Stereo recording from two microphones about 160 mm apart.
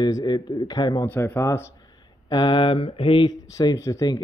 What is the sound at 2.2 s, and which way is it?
Mantra, 30° left (ahead or behind).